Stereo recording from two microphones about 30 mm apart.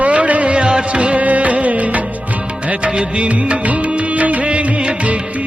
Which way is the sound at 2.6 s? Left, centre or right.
Right.